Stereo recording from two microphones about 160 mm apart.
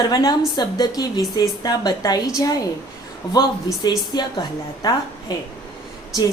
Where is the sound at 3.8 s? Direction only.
25° left (ahead or behind).